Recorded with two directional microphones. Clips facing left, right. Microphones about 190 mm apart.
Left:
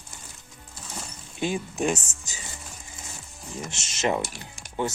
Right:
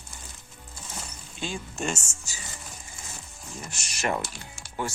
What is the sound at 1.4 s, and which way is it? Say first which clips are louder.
Speech: left 6 dB; 20° left (ahead or behind).